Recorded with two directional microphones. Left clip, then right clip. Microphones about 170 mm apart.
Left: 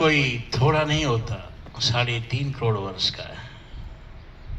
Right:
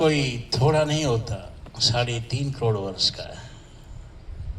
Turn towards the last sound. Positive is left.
turn(degrees=-40)  # may be behind; listen again after turning